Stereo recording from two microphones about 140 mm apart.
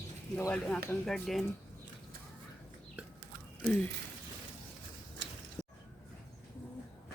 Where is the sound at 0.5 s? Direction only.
5° left (ahead or behind).